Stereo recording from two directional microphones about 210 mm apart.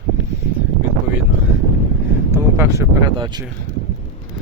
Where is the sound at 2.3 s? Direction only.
15° right (ahead or behind).